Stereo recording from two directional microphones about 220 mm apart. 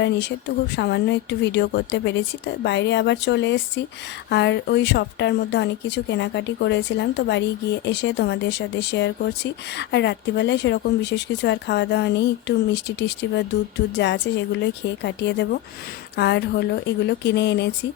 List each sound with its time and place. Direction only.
0.0 s speech: 50° left (ahead or behind)